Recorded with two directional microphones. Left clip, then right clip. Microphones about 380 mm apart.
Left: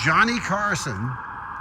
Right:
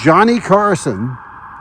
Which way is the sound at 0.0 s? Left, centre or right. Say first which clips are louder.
Right 8 dB; centre.